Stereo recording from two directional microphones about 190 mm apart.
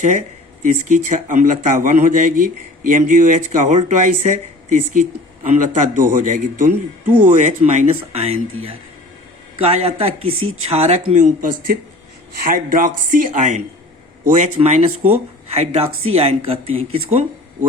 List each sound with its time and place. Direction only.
0.0 s speech: 40° right (ahead or behind)
9.6 s speech: 30° right (ahead or behind)
10.2 s speech: 90° right
10.7 s speech: 35° right (ahead or behind)
16.6 s speech: 90° right